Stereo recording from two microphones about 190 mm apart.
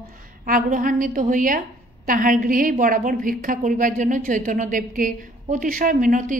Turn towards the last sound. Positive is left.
turn(degrees=-45)  # may be behind; listen again after turning